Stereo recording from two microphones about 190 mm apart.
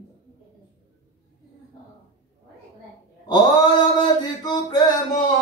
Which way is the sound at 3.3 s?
20° left (ahead or behind).